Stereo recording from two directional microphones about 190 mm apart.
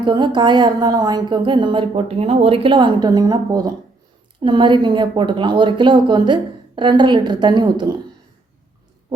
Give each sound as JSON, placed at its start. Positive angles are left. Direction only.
{"t": 0.0, "sound": "a woman's voice", "side_deg": -25}